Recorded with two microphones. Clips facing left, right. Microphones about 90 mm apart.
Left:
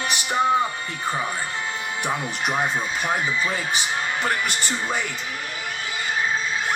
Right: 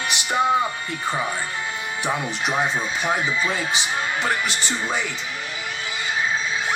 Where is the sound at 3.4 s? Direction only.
40° left (ahead or behind).